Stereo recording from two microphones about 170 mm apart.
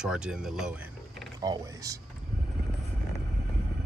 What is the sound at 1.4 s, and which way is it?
Mechanisms, 20° right (ahead or behind).